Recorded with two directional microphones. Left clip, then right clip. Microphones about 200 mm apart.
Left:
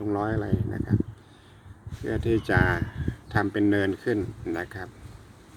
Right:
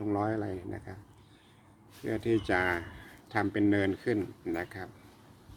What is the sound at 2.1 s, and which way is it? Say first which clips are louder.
Speech: left 4 dB; 5° right (ahead or behind).